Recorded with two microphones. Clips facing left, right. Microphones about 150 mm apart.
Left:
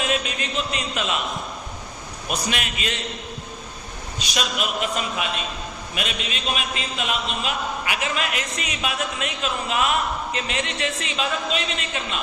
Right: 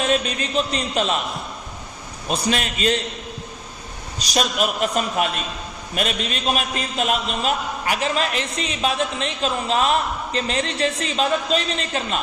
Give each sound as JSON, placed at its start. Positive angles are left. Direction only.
{"t": 0.0, "sound": "a man's voice", "side_deg": -35}
{"t": 2.3, "sound": "a man's voice", "side_deg": -35}
{"t": 4.2, "sound": "a man's voice", "side_deg": -40}